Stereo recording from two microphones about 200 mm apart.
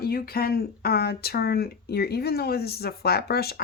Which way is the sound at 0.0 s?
50° left (ahead or behind).